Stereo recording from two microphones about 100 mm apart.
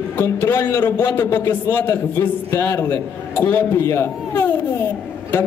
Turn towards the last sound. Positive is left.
turn(degrees=25)  # may be behind; listen again after turning